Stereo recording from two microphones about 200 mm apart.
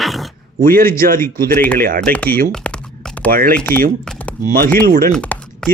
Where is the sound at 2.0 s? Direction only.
5° left (ahead or behind).